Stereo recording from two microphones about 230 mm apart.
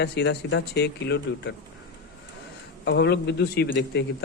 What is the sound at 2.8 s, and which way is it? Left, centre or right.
Speech, left.